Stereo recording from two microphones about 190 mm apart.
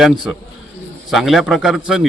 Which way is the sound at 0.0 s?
Centre (ahead or behind).